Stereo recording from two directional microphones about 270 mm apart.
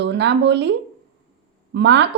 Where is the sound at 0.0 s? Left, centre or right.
Right.